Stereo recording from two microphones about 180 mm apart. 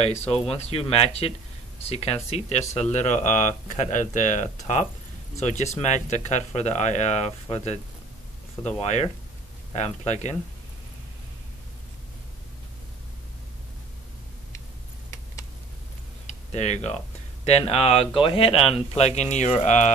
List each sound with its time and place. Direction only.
0.3 s speech: 35° left (ahead or behind)
16.3 s tick-tock: 40° left (ahead or behind)
17.5 s speech: 35° left (ahead or behind)